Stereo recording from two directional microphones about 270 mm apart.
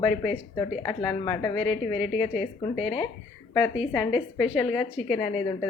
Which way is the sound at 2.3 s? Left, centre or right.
Centre.